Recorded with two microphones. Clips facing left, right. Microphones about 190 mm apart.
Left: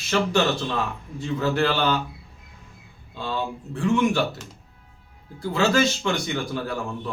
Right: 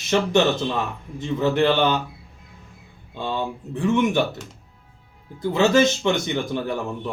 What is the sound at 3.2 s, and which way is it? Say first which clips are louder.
Speech: right 2 dB; 20° right (ahead or behind).